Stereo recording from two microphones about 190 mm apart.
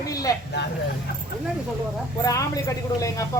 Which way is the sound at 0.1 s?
20° left (ahead or behind).